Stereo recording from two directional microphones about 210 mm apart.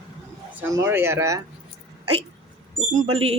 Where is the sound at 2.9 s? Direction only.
30° right (ahead or behind).